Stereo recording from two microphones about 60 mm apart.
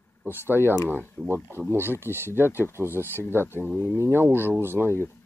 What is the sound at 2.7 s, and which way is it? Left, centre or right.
Speech, right.